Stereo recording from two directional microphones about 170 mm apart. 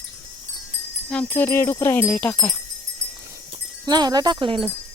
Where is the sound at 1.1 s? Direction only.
15° left (ahead or behind).